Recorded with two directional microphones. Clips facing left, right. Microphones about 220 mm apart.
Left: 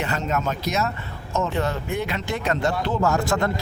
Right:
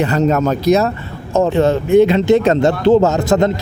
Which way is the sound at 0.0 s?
35° right (ahead or behind).